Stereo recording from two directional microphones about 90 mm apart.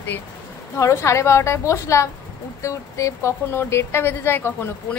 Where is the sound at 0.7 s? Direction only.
35° left (ahead or behind).